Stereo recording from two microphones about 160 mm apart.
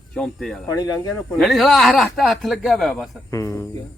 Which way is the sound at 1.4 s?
Centre (ahead or behind).